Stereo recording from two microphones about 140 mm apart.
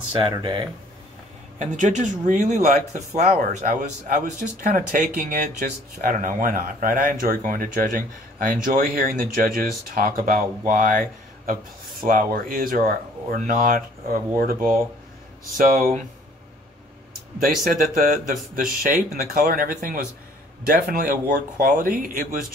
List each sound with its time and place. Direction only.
0.1 s speech: 35° right (ahead or behind)
1.6 s speech: 60° right (ahead or behind)
3.2 s speech: 75° right (ahead or behind)
12.0 s speech: 85° right
17.4 s speech: 85° right